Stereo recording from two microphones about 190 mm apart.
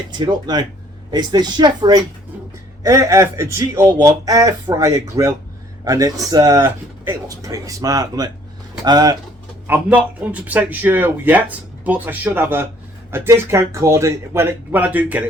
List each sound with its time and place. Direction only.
0.1 s a man's voice: 20° right (ahead or behind)
9.6 s a man's voice: 10° right (ahead or behind)